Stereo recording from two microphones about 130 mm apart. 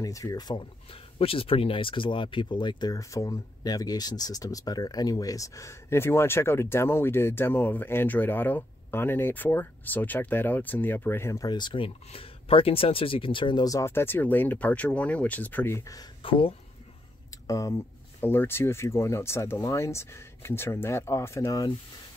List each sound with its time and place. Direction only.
0.0 s speech: 25° left (ahead or behind)
1.1 s speech: 45° left (ahead or behind); by 11.4 s 20° left (ahead or behind)
11.4 s speech: 35° left (ahead or behind)
16.2 s speech: 45° left (ahead or behind)
17.5 s speech: 25° left (ahead or behind)